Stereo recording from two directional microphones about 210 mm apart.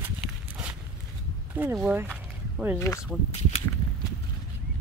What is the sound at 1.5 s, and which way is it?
Speech, 5° right (ahead or behind).